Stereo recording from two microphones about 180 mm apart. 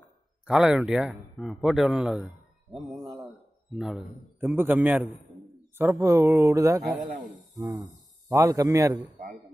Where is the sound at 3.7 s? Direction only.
Centre (ahead or behind).